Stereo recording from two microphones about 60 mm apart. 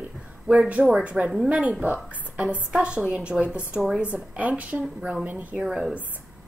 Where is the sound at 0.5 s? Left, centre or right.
Right.